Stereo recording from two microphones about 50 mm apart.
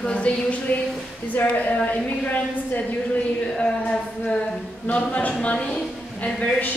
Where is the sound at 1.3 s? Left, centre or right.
Left.